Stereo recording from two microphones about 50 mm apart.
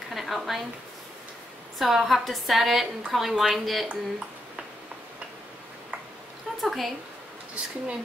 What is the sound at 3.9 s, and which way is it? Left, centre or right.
Speech, centre.